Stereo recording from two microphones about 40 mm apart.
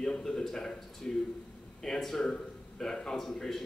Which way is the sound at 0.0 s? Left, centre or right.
Centre.